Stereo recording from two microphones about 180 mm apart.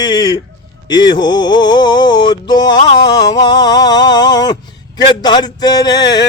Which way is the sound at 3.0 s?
20° left (ahead or behind).